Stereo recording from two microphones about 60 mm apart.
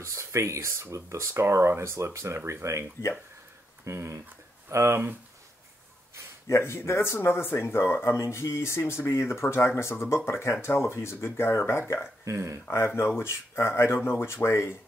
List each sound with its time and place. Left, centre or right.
0.0 s speech: right
3.8 s speech: right
6.5 s speech: left
12.3 s speech: right
12.8 s speech: left